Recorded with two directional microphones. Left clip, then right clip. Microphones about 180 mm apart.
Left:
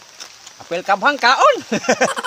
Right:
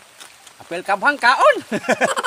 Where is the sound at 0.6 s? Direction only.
15° left (ahead or behind).